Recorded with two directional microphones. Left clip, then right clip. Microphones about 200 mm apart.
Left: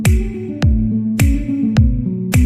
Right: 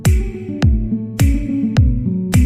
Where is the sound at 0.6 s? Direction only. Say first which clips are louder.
Right 1 dB; centre (ahead or behind).